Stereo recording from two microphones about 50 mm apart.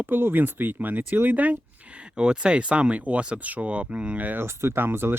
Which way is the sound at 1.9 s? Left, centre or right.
Right.